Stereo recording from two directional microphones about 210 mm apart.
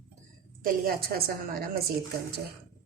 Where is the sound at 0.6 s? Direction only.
45° right (ahead or behind).